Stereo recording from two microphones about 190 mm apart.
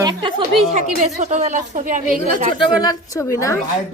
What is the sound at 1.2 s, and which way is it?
Speech, 40° right (ahead or behind).